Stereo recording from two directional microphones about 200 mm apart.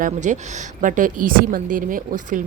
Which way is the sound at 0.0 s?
40° right (ahead or behind).